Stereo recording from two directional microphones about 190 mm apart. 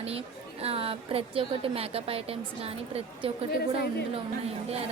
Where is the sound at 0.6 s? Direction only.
30° right (ahead or behind).